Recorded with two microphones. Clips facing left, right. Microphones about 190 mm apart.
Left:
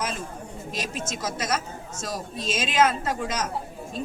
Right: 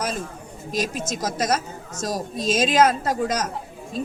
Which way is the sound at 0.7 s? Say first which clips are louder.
Right 7 dB; 40° right (ahead or behind).